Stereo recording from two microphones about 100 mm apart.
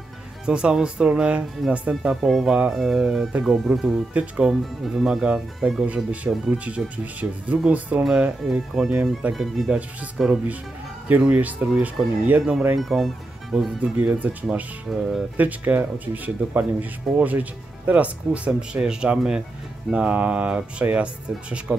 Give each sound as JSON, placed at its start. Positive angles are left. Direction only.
{"t": 0.5, "sound": "speech", "side_deg": -10}
{"t": 11.1, "sound": "speech", "side_deg": -15}
{"t": 13.9, "sound": "speech", "side_deg": -15}
{"t": 14.9, "sound": "speech", "side_deg": -5}
{"t": 15.3, "sound": "speech", "side_deg": -15}